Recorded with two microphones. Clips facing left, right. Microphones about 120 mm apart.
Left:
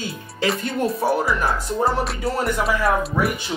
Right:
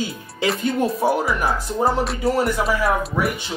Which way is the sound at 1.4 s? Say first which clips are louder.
Right 1 dB; centre (ahead or behind).